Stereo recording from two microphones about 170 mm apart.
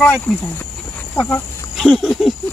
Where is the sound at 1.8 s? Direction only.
Centre (ahead or behind).